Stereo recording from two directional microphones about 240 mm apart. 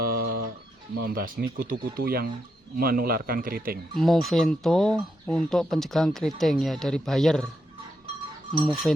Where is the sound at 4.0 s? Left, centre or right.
Centre.